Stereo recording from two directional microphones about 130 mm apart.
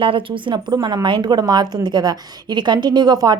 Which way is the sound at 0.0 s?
45° right (ahead or behind).